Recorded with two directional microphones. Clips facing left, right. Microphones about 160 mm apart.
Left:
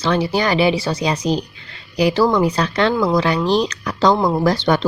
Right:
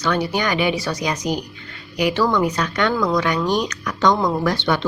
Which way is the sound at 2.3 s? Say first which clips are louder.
Left 3 dB; 30° left (ahead or behind).